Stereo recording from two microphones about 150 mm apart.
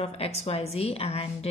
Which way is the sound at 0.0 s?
45° left (ahead or behind).